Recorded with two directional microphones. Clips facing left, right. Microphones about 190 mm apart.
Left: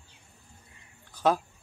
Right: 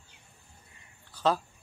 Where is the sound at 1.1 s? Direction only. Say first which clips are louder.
Left 2 dB; 15° left (ahead or behind).